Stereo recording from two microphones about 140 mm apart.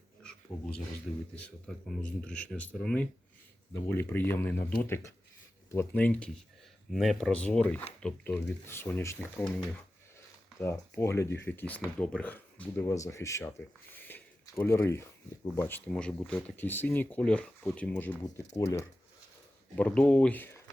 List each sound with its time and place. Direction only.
0.5 s speech: 10° left (ahead or behind)
18.5 s speech: 25° left (ahead or behind)
19.7 s speech: 10° left (ahead or behind)